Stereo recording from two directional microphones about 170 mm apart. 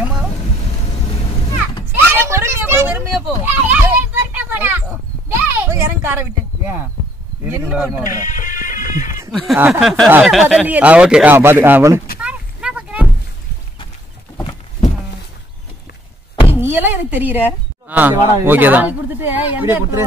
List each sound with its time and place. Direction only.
1.9 s a sound: 15° right (ahead or behind)
7.4 s speech: 10° right (ahead or behind)
8.2 s music: 50° left (ahead or behind)
9.6 s speech: 5° right (ahead or behind)
12.2 s a sound: 5° right (ahead or behind)
16.4 s speech: 10° right (ahead or behind)